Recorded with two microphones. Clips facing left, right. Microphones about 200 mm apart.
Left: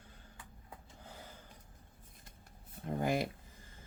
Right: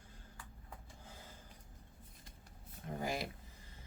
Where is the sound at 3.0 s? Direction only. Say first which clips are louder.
Left 7 dB; 55° left (ahead or behind).